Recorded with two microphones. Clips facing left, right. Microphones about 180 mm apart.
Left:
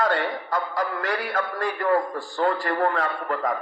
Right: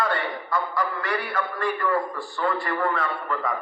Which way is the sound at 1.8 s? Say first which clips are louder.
Left 3 dB; 45° left (ahead or behind).